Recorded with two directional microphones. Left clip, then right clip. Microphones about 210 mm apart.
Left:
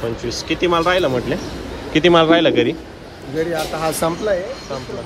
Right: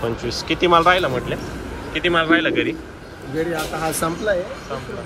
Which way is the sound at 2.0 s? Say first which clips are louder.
Left 5 dB; 30° left (ahead or behind).